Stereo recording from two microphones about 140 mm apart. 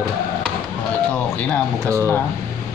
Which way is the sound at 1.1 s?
10° left (ahead or behind).